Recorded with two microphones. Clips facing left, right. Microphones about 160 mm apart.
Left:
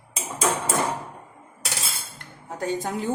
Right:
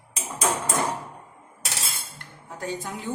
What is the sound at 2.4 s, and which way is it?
Speech, 40° left (ahead or behind).